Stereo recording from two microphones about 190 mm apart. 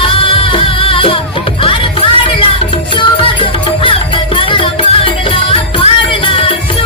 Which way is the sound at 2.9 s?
25° left (ahead or behind).